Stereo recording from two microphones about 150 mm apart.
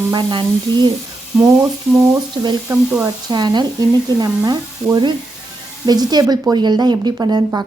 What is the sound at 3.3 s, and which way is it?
Speech, 30° right (ahead or behind).